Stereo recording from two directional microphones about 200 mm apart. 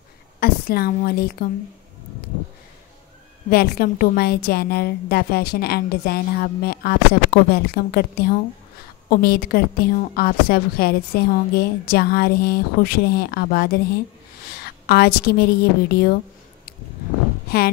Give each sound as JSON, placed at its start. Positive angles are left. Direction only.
{"t": 0.4, "sound": "a woman's voice", "side_deg": 50}
{"t": 3.4, "sound": "a woman's voice", "side_deg": 50}